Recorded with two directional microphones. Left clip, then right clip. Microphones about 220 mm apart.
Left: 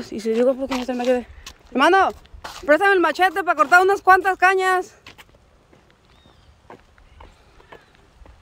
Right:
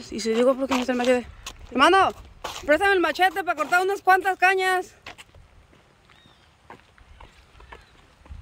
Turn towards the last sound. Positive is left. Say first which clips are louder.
# left 1 dB
turn(degrees=10)  # may be behind; listen again after turning